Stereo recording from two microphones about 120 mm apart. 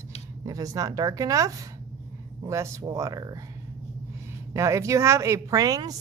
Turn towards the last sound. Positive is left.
turn(degrees=-30)  # may be behind; listen again after turning